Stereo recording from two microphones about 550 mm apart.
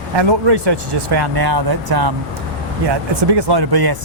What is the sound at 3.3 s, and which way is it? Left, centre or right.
Speech, right.